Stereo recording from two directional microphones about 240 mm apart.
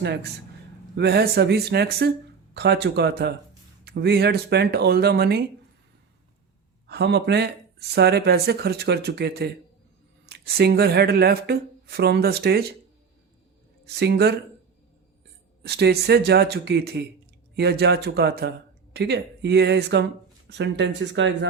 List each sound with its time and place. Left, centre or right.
0.0 s speech: right
6.8 s speech: right
13.8 s speech: right
15.6 s speech: right